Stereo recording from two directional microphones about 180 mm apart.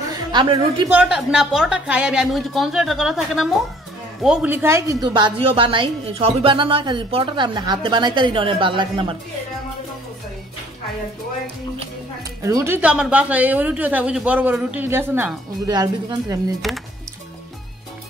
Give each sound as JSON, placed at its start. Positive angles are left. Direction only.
{"t": 0.3, "sound": "a woman's voice", "side_deg": -25}
{"t": 0.8, "sound": "a woman's voice", "side_deg": -5}
{"t": 12.4, "sound": "a woman's voice", "side_deg": -15}